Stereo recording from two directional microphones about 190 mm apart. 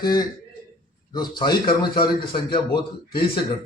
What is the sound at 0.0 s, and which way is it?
A man's voice, 20° left (ahead or behind).